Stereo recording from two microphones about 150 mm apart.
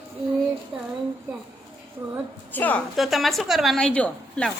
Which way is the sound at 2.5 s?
10° left (ahead or behind).